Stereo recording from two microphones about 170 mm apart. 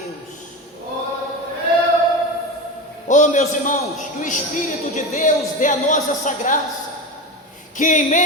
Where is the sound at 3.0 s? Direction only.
45° left (ahead or behind).